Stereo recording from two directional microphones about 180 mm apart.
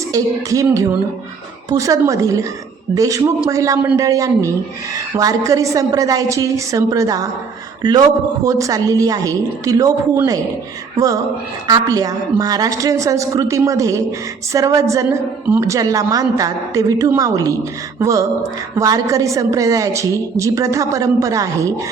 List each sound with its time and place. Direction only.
0.1 s a woman's voice: 20° right (ahead or behind)
10.9 s a woman's voice: 20° right (ahead or behind)